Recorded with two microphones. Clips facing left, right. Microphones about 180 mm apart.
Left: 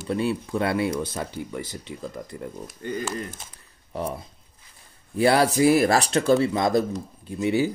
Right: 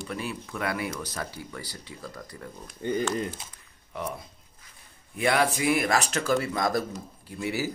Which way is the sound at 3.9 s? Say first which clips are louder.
Left 5 dB; 35° left (ahead or behind).